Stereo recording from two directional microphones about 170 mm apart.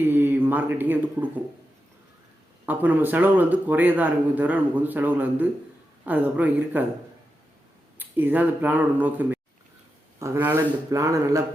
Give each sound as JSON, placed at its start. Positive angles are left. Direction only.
{"t": 0.0, "sound": "speech", "side_deg": -10}
{"t": 2.6, "sound": "speech", "side_deg": -10}
{"t": 7.9, "sound": "speech", "side_deg": -10}